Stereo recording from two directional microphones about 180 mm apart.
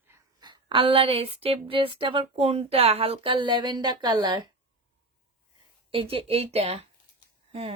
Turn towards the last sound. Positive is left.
turn(degrees=-35)  # may be behind; listen again after turning